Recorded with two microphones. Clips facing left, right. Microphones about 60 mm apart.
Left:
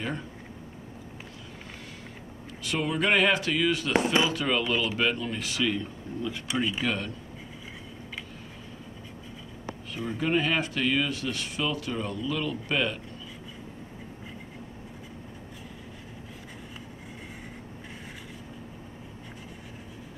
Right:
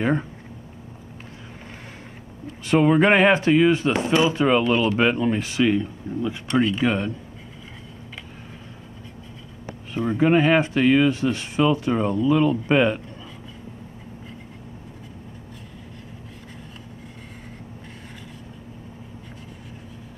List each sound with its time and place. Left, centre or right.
2.4 s speech: right
3.9 s speech: left
4.2 s speech: right
6.5 s speech: centre
6.8 s speech: right
10.1 s speech: right